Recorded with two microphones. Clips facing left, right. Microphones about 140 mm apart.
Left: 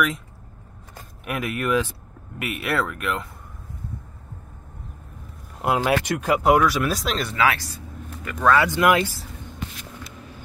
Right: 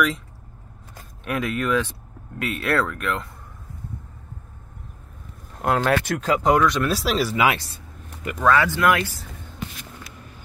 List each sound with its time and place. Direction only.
1.2 s speech: 5° left (ahead or behind)
5.6 s speech: 10° left (ahead or behind)
7.3 s speech: 20° right (ahead or behind)
8.4 s speech: centre (ahead or behind)
8.6 s speech: 15° left (ahead or behind)